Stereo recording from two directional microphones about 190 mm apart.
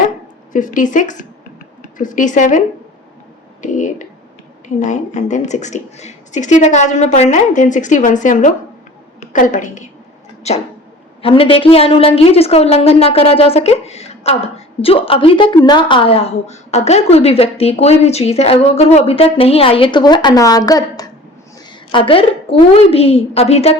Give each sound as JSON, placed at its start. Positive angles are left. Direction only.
{"t": 0.5, "sound": "a woman's voice", "side_deg": 45}